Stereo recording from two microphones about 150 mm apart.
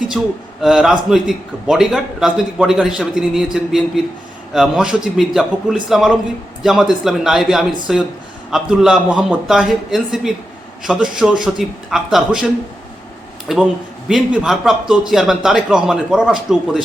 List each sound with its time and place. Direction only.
0.2 s a man's voice: 5° right (ahead or behind)
13.5 s a man's voice: centre (ahead or behind)